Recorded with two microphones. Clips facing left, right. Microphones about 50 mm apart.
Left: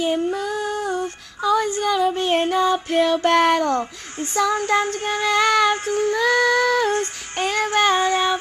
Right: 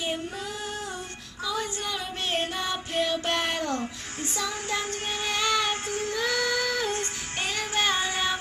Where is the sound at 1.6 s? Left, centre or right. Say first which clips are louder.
Left 12 dB; left.